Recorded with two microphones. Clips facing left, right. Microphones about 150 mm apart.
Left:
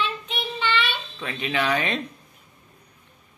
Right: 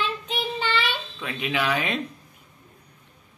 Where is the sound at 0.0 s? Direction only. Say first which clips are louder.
Right 1 dB; 40° right (ahead or behind).